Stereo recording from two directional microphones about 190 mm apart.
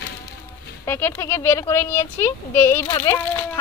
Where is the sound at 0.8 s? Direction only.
10° left (ahead or behind).